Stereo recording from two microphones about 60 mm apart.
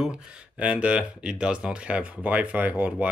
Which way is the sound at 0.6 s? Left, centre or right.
Right.